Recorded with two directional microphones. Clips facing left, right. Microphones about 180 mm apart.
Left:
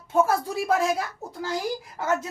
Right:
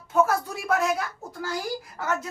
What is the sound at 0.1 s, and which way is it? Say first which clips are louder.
Speech: left 1 dB; 30° left (ahead or behind).